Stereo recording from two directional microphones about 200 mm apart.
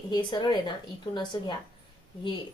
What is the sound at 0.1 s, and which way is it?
A woman's voice, 20° left (ahead or behind).